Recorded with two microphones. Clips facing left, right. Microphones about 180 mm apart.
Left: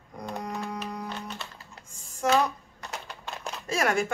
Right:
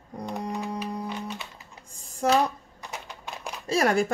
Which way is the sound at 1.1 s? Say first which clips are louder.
Right 3 dB; 15° right (ahead or behind).